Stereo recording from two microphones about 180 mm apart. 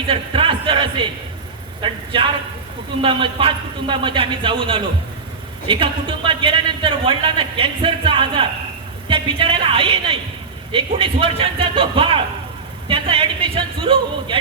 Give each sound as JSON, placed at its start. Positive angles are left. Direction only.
{"t": 0.1, "sound": "a sound", "side_deg": -30}
{"t": 1.8, "sound": "a man's voice", "side_deg": -30}
{"t": 3.0, "sound": "a man's voice", "side_deg": -30}